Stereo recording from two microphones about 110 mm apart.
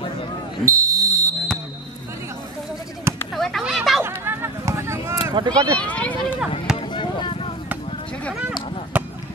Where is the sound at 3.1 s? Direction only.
25° right (ahead or behind).